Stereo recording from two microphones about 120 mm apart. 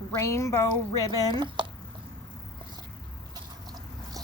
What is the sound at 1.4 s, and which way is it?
Speech, 45° right (ahead or behind).